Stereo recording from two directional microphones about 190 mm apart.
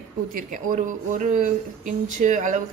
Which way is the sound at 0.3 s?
45° right (ahead or behind).